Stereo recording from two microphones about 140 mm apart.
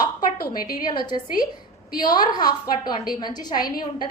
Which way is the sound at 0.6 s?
30° left (ahead or behind).